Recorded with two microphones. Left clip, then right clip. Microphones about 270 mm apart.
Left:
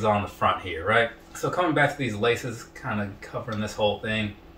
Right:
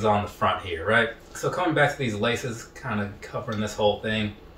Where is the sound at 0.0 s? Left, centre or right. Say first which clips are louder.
Even; centre.